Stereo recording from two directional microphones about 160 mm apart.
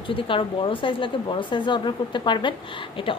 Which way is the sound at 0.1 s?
35° left (ahead or behind).